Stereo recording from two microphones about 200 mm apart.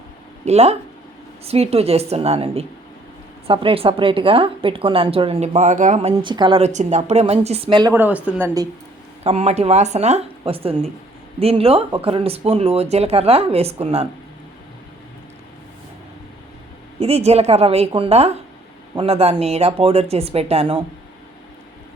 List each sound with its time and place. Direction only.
0.4 s a woman's voice: 30° right (ahead or behind)
7.9 s speech: 10° right (ahead or behind)
9.2 s speech: 30° right (ahead or behind)
17.0 s speech: 30° right (ahead or behind)